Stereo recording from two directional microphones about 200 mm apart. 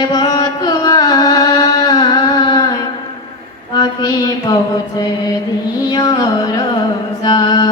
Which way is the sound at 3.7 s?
20° left (ahead or behind).